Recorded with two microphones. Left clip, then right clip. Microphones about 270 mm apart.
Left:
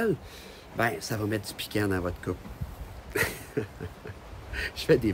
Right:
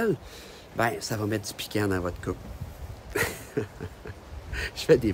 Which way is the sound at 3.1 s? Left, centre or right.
Centre.